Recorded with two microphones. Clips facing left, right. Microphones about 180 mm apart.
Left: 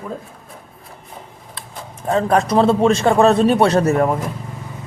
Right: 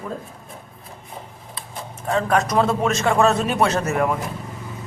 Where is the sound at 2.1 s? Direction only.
35° left (ahead or behind).